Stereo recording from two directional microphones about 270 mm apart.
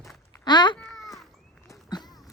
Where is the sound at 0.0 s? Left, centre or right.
Centre.